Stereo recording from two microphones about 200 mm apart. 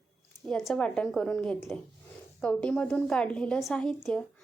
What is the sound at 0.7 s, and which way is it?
A woman's voice, 5° left (ahead or behind).